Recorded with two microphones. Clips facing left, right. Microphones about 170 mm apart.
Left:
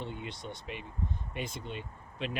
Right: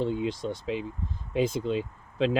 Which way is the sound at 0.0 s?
90° right.